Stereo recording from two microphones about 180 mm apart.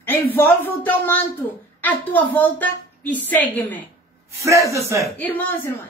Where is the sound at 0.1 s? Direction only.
10° left (ahead or behind).